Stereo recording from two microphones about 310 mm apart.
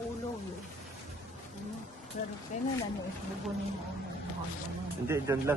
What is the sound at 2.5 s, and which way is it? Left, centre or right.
Speech, left.